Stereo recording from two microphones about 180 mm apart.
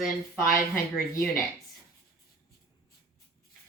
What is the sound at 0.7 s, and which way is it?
Speech, 50° left (ahead or behind).